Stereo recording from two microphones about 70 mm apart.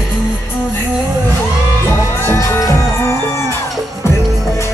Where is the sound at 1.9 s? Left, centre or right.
Left.